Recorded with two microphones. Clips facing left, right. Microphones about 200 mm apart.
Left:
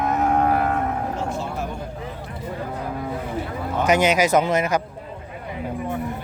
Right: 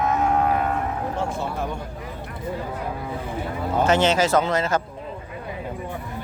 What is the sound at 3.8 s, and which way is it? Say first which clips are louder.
Speech: left 1 dB; 15° left (ahead or behind).